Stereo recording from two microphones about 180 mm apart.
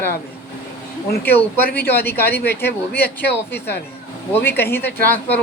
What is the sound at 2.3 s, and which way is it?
Speech, 65° left (ahead or behind).